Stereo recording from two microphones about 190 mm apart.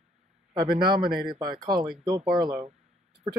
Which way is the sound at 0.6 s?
25° right (ahead or behind).